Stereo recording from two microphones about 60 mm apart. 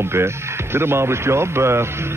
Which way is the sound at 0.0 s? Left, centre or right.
Right.